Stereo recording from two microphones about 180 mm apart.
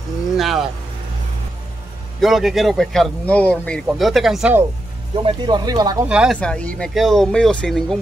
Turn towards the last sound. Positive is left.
turn(degrees=5)  # may be behind; listen again after turning